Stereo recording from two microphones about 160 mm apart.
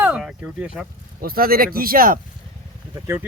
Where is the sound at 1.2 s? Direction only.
65° right (ahead or behind).